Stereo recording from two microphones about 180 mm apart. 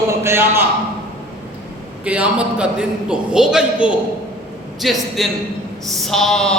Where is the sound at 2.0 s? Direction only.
5° right (ahead or behind).